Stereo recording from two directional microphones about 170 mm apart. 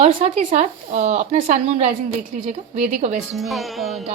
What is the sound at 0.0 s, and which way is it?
Speech, 35° right (ahead or behind).